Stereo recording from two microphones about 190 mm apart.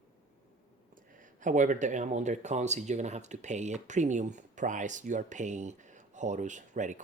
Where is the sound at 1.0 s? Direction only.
45° right (ahead or behind).